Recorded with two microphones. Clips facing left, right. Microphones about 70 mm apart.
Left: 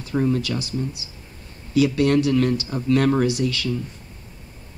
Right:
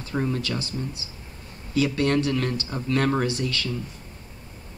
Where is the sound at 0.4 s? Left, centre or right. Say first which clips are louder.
Left 4 dB; centre.